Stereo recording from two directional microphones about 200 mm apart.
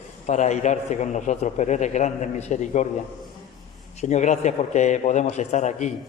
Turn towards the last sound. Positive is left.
turn(degrees=35)  # may be behind; listen again after turning